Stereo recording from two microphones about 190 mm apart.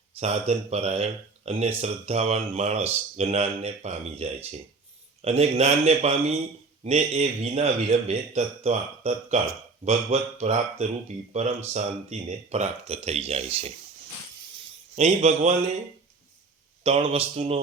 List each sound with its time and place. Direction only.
0.2 s speech: 35° right (ahead or behind)
14.9 s speech: 35° right (ahead or behind)
16.8 s speech: 30° right (ahead or behind)